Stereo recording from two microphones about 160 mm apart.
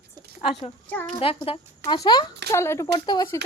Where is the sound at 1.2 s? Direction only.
35° left (ahead or behind).